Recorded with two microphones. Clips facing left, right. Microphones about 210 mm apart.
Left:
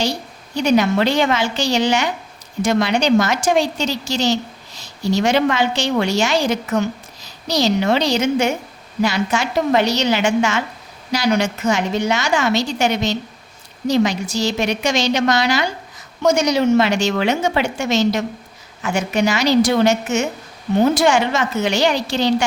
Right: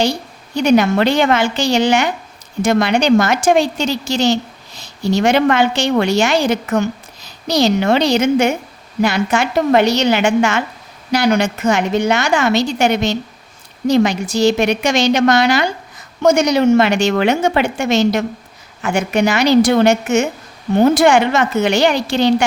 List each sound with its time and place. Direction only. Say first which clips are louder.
0.6 s a woman's voice: right 3 dB; 55° right (ahead or behind)